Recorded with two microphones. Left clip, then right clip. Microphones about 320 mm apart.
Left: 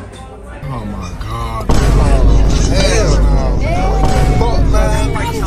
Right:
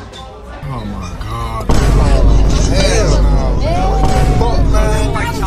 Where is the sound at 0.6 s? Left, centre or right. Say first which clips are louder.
Left 1 dB; centre.